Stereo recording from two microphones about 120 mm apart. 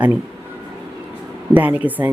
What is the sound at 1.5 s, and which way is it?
Speech, 15° right (ahead or behind).